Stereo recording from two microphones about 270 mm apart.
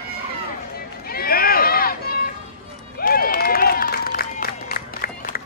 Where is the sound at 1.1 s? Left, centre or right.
Left.